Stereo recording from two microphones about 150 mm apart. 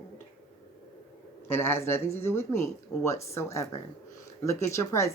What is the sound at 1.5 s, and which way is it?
A man's voice, 15° left (ahead or behind).